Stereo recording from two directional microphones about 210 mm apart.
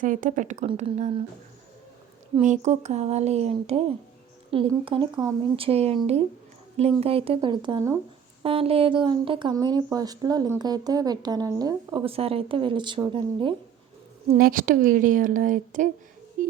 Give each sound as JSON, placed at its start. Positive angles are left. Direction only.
{"t": 0.0, "sound": "a woman's voice", "side_deg": -40}
{"t": 2.4, "sound": "a woman's voice", "side_deg": -35}
{"t": 14.3, "sound": "a woman's voice", "side_deg": -40}